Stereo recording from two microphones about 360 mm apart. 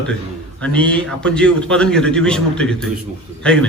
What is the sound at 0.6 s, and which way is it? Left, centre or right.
A man's voice, centre.